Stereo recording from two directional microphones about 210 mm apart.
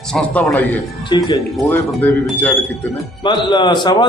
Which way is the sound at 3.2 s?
20° left (ahead or behind).